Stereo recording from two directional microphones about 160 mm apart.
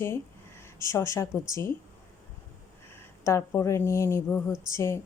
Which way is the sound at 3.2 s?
15° left (ahead or behind).